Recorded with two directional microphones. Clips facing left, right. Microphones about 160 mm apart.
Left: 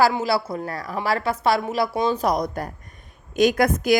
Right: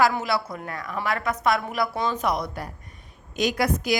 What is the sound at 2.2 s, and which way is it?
A woman's voice, 40° left (ahead or behind).